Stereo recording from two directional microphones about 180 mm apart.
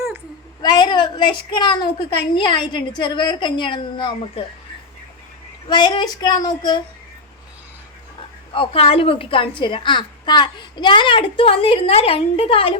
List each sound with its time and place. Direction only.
0.6 s a woman's voice: 25° left (ahead or behind)
5.6 s a woman's voice: 25° left (ahead or behind)
8.5 s a woman's voice: 30° left (ahead or behind)